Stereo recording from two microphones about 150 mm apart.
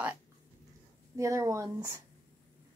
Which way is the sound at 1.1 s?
20° right (ahead or behind).